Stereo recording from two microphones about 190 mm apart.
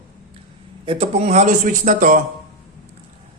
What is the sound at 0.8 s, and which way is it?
A man's voice, 30° right (ahead or behind).